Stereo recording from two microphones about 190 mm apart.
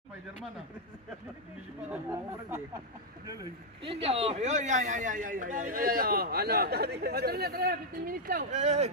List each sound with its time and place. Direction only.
3.8 s a man's voice: 30° right (ahead or behind)